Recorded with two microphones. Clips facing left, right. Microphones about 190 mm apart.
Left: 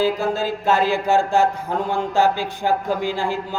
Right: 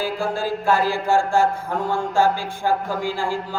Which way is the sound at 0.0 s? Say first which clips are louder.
Left 4 dB; 20° left (ahead or behind).